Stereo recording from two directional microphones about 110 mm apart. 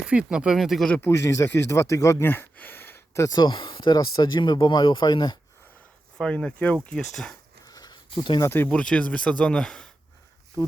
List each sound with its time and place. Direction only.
0.0 s speech: 10° right (ahead or behind)
0.9 s speech: 25° left (ahead or behind)
3.2 s speech: 40° left (ahead or behind)
6.1 s speech: 5° left (ahead or behind)
7.6 s a sound: 35° left (ahead or behind)
8.4 s speech: 20° left (ahead or behind)
8.7 s speech: 10° left (ahead or behind)